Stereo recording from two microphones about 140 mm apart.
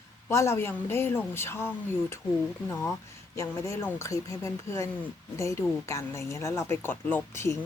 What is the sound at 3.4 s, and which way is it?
Speech, 20° left (ahead or behind).